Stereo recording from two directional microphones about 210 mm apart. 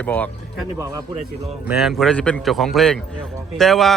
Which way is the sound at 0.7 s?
15° right (ahead or behind).